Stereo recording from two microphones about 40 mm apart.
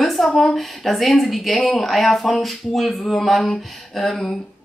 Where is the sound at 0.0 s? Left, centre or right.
Centre.